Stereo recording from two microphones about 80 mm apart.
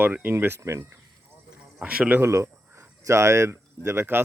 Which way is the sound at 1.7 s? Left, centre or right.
Centre.